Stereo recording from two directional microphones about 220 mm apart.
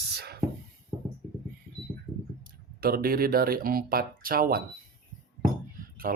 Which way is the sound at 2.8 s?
40° right (ahead or behind).